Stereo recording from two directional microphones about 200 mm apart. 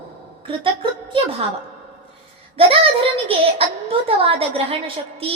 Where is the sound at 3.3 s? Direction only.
30° right (ahead or behind).